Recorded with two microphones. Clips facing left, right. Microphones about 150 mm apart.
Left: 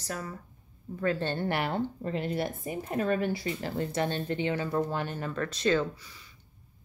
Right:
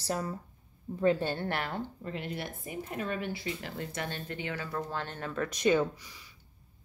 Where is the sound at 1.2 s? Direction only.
5° right (ahead or behind).